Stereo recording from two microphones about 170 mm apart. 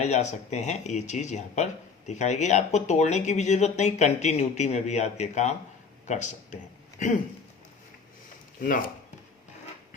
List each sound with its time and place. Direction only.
0.0 s speech: 40° left (ahead or behind)